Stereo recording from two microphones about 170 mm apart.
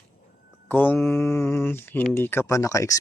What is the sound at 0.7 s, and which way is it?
Speech, 10° left (ahead or behind).